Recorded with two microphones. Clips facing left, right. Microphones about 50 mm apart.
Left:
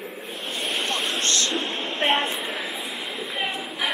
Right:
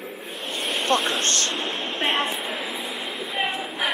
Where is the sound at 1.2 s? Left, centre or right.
Right.